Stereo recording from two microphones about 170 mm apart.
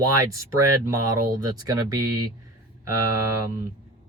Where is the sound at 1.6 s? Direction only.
20° right (ahead or behind).